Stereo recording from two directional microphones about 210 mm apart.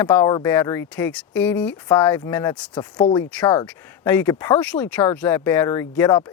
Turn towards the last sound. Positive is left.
turn(degrees=15)  # may be behind; listen again after turning